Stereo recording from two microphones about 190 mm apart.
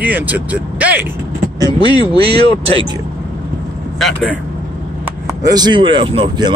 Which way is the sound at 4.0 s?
Centre (ahead or behind).